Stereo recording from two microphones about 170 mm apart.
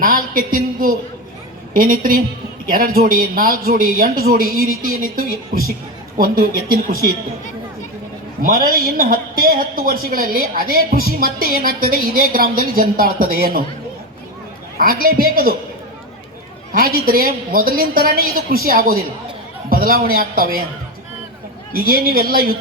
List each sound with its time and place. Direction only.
0.0 s a sound: 55° right (ahead or behind)
1.7 s speech: 55° right (ahead or behind)
8.4 s speech: 55° right (ahead or behind)
14.8 s speech: 60° right (ahead or behind)
16.7 s speech: 60° right (ahead or behind)
21.7 s speech: 60° right (ahead or behind)